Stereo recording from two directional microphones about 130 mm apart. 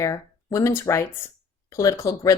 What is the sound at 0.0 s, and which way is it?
Speech, 25° left (ahead or behind).